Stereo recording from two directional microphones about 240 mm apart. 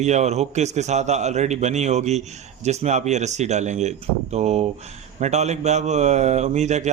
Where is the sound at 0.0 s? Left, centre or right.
Right.